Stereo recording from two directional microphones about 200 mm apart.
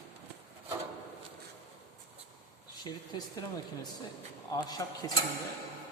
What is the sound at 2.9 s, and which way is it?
Speech, 20° left (ahead or behind).